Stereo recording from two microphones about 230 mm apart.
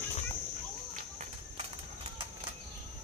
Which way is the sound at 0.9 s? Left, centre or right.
Right.